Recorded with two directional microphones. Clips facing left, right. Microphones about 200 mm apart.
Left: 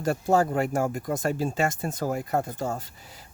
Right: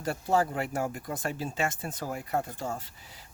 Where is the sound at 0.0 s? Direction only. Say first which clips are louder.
Left 5 dB; 45° left (ahead or behind).